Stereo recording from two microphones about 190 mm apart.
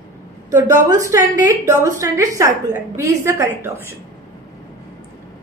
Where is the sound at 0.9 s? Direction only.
15° right (ahead or behind).